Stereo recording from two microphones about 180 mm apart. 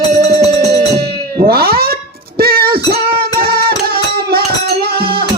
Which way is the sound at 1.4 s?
60° right (ahead or behind).